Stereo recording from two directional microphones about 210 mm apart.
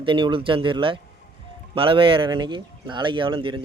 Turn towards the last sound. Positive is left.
turn(degrees=-25)  # may be behind; listen again after turning